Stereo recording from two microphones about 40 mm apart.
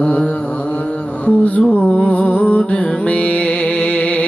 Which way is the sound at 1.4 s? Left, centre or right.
Left.